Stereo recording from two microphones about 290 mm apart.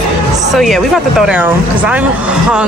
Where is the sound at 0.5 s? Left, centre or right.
Centre.